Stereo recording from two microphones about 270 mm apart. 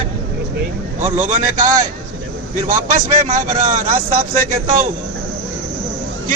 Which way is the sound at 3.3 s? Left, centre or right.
Right.